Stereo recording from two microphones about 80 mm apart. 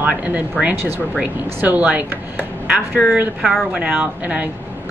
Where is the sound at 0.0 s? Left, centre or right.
Centre.